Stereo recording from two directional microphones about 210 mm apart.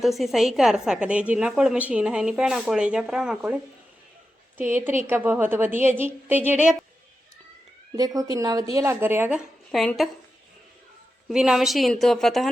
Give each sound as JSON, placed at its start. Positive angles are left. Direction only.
{"t": 0.0, "sound": "a woman's voice", "side_deg": 0}
{"t": 7.9, "sound": "a woman's voice", "side_deg": -15}
{"t": 11.3, "sound": "a woman's voice", "side_deg": 0}